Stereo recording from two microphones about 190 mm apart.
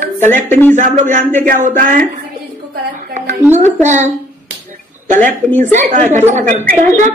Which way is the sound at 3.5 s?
35° right (ahead or behind).